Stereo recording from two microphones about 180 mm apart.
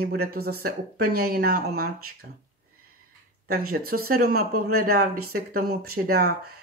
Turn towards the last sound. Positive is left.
turn(degrees=-55)  # may be behind; listen again after turning